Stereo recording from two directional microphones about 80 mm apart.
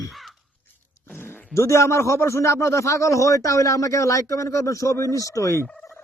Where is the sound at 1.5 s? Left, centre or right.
Left.